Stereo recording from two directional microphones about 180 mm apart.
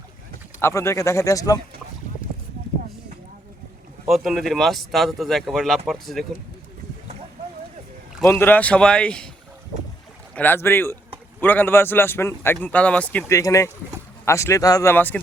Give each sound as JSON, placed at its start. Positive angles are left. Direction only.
{"t": 0.6, "sound": "a man's voice", "side_deg": 15}
{"t": 4.1, "sound": "speech", "side_deg": 0}
{"t": 8.2, "sound": "a man's voice", "side_deg": 10}
{"t": 10.3, "sound": "a man's voice", "side_deg": 10}